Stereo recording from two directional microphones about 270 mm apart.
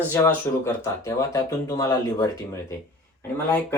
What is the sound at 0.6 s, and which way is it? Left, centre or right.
Speech, centre.